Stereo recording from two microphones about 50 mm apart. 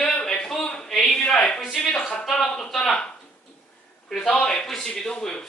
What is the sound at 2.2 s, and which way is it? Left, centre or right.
Speech, centre.